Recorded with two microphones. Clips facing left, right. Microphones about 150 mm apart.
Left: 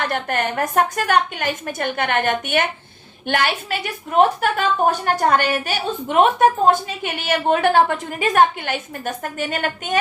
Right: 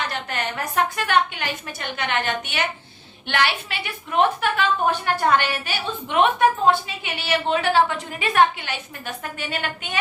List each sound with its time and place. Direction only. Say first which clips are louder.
0.0 s a woman's voice: left 5 dB; 50° left (ahead or behind)